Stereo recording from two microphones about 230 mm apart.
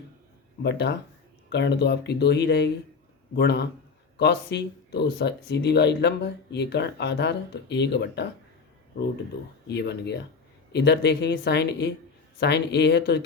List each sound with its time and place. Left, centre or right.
0.6 s speech: left
9.6 s speech: left